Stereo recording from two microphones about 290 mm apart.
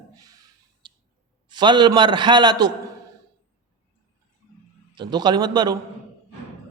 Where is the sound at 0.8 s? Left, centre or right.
Centre.